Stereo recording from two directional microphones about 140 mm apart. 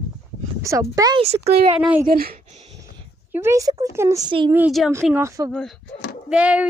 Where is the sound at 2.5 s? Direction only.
50° right (ahead or behind).